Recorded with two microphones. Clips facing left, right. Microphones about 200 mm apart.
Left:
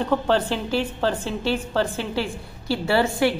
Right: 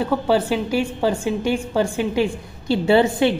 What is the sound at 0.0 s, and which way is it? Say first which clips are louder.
A woman's voice: right 2 dB; 10° right (ahead or behind).